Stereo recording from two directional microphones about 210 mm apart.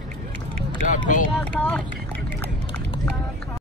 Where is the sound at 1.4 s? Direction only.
5° left (ahead or behind).